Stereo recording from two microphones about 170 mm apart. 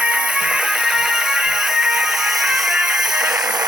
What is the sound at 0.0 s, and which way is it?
Music, 5° right (ahead or behind).